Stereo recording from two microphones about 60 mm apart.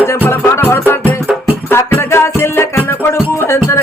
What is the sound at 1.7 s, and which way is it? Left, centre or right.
Music, left.